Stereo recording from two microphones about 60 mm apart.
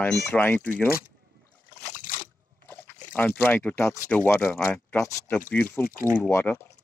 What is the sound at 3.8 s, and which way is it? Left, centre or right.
Speech, left.